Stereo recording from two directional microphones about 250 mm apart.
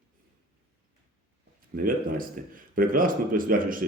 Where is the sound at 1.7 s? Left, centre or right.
Right.